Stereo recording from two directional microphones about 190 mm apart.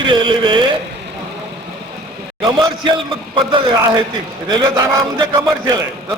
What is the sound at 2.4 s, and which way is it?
A man's voice, 25° right (ahead or behind).